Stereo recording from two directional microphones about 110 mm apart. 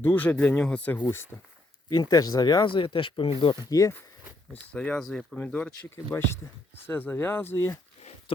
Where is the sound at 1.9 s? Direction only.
35° left (ahead or behind).